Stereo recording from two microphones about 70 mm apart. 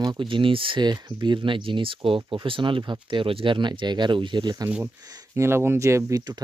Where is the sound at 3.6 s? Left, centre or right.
Right.